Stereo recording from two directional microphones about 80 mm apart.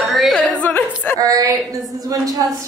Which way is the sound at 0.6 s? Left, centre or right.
Left.